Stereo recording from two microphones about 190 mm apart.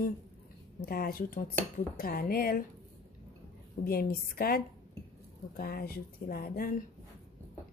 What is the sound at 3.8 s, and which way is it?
Speech, 50° left (ahead or behind).